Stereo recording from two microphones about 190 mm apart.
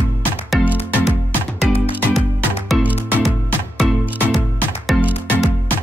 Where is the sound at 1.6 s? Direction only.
Centre (ahead or behind).